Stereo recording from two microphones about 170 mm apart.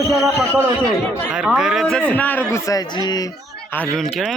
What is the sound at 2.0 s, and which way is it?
A man's voice, 10° left (ahead or behind).